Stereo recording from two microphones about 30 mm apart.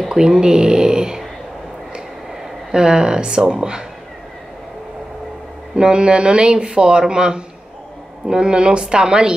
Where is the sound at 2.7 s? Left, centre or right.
Right.